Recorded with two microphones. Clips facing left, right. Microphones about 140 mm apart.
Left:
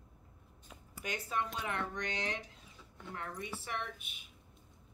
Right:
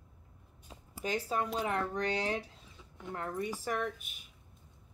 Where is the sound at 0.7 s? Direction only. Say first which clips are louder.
Right 7 dB; 30° right (ahead or behind).